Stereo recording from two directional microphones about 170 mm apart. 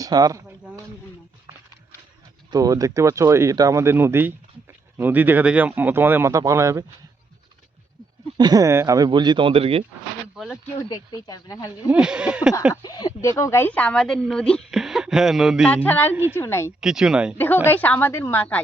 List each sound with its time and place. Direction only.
0.0 s speech: 20° right (ahead or behind)
2.5 s speech: 20° right (ahead or behind)
8.4 s speech: 20° right (ahead or behind)
10.3 s a sound: centre (ahead or behind)
10.8 s speech: 20° left (ahead or behind)
11.9 s speech: 5° right (ahead or behind)
12.8 s speech: 25° left (ahead or behind); by 15.7 s centre (ahead or behind)
15.7 s a woman's voice: 10° left (ahead or behind)
16.8 s speech: 5° right (ahead or behind)
17.3 s a woman's voice: 10° left (ahead or behind)